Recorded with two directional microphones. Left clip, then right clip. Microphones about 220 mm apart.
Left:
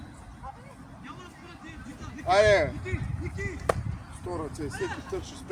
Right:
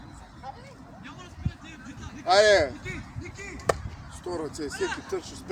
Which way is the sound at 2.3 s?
40° right (ahead or behind).